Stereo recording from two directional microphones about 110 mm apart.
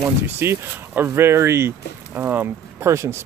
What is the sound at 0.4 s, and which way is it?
Speech, 20° right (ahead or behind).